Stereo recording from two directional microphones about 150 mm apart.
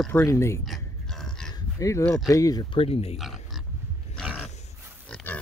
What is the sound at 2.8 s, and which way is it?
Speech, 40° left (ahead or behind).